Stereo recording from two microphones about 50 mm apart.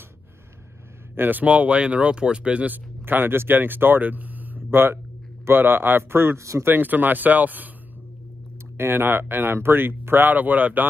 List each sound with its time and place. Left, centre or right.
1.1 s speech: right
1.4 s speech: right
2.7 s speech: right
4.6 s speech: right
6.6 s speech: right
8.7 s speech: right